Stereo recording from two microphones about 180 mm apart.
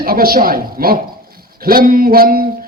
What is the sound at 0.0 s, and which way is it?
A man's voice, 55° right (ahead or behind).